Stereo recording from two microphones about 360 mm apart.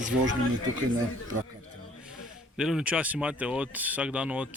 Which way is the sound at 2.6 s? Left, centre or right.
Centre.